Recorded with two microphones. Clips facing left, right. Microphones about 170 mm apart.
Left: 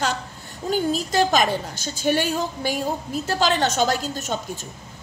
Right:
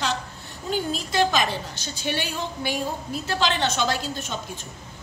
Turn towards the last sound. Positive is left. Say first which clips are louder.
# left 3 dB
turn(degrees=45)  # may be behind; listen again after turning